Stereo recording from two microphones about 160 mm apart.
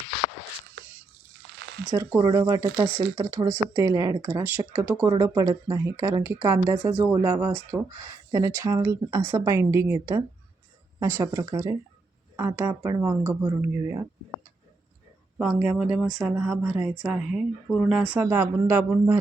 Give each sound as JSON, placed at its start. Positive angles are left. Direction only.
{"t": 2.0, "sound": "speech", "side_deg": -20}
{"t": 15.4, "sound": "speech", "side_deg": -10}